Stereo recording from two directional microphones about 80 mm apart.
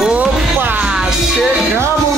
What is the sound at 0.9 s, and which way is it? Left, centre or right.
Music, centre.